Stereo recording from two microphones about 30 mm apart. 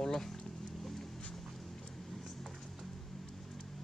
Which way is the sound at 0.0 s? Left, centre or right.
Centre.